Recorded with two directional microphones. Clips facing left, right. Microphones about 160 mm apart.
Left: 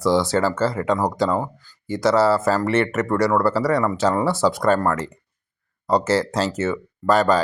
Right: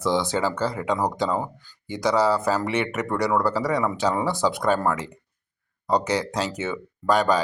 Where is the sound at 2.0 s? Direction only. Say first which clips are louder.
Left 4 dB; 15° right (ahead or behind).